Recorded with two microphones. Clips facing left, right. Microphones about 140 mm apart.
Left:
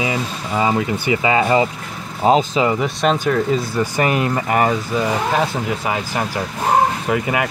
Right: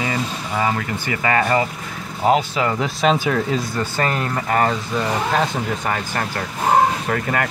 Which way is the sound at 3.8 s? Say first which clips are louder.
Left 4 dB; 15° left (ahead or behind).